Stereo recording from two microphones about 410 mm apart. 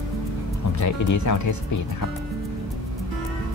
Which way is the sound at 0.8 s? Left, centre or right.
Left.